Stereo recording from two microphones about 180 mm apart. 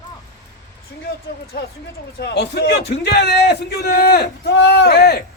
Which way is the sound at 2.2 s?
70° left (ahead or behind).